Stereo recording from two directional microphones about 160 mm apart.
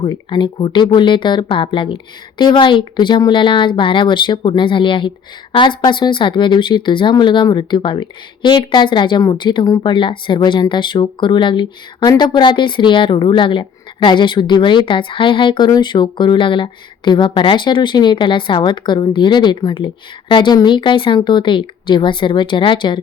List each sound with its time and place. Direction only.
0.0 s a woman's voice: 30° left (ahead or behind)